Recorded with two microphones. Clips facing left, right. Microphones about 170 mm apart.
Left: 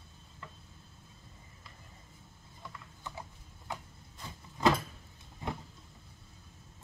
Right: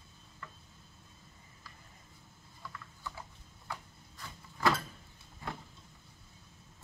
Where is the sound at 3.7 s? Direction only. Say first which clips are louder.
Left 2 dB; 20° left (ahead or behind).